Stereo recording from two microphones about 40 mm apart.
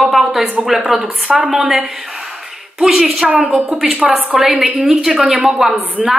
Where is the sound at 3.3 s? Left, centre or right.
Right.